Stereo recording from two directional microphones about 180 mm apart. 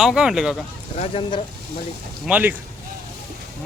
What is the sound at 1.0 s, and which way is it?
Speech, 30° left (ahead or behind).